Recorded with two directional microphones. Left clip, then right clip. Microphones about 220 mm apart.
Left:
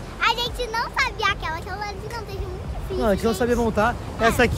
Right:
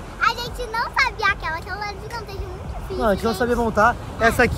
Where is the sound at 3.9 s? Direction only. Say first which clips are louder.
Right 2 dB; centre (ahead or behind).